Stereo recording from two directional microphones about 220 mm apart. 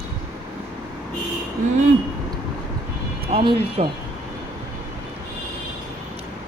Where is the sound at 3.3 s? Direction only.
25° right (ahead or behind).